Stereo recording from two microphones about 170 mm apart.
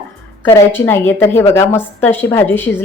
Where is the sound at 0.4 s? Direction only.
15° left (ahead or behind).